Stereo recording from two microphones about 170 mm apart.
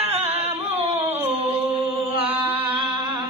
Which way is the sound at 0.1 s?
40° right (ahead or behind).